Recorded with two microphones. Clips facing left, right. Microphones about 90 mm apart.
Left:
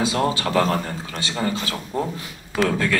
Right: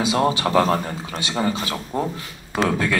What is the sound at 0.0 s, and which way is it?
A man's voice, 20° right (ahead or behind).